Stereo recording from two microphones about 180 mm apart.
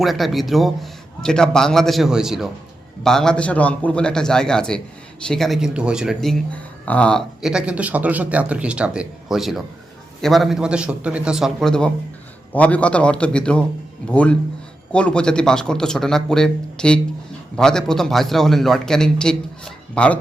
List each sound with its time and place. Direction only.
0.0 s a man's voice: centre (ahead or behind)